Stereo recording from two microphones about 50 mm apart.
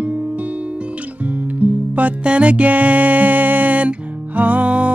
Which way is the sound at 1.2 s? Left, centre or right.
Right.